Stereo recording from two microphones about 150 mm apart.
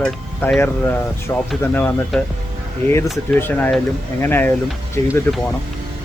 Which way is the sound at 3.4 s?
15° left (ahead or behind).